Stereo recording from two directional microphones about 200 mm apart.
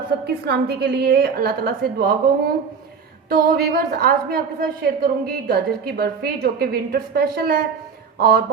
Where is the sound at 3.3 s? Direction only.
50° right (ahead or behind).